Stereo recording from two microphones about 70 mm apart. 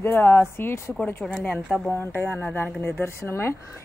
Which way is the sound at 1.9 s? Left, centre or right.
Left.